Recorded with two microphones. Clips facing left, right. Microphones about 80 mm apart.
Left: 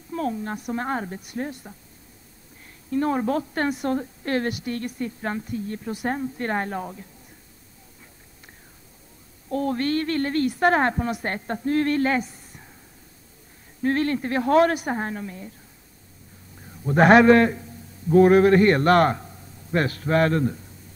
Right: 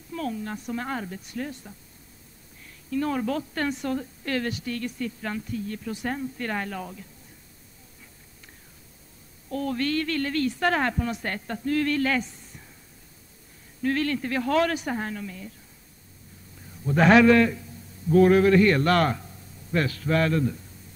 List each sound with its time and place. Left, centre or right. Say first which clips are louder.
0.1 s a woman's voice: left 4 dB; left
2.9 s a woman's voice: left 4 dB; left
9.5 s a woman's voice: left 3 dB; left
13.8 s a woman's voice: left 3 dB; left
16.8 s a woman's voice: left 3 dB; left